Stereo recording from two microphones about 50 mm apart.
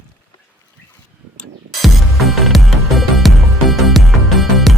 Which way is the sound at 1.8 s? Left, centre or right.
Centre.